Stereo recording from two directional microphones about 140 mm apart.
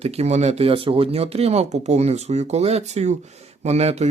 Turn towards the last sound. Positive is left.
turn(degrees=-50)  # may be behind; listen again after turning